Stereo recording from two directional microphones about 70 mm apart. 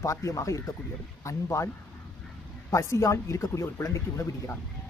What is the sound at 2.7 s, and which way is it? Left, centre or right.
Speech, left.